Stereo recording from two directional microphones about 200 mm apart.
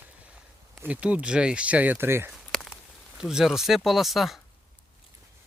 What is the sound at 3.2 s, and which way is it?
Speech, 5° right (ahead or behind).